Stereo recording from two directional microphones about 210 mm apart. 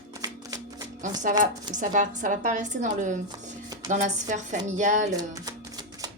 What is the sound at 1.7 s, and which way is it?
A woman's voice, 35° right (ahead or behind).